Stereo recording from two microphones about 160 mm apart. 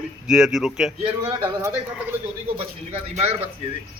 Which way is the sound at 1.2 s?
15° right (ahead or behind).